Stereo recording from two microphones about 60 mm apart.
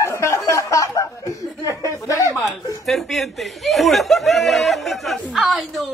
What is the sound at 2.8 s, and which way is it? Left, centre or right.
Speech, centre.